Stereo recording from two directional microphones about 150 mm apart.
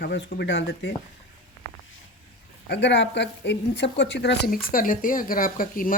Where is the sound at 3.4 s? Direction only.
90° left.